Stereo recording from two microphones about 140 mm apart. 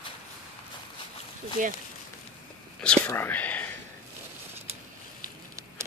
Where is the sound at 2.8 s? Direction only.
15° left (ahead or behind).